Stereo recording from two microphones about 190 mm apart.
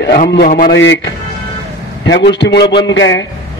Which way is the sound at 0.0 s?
55° left (ahead or behind).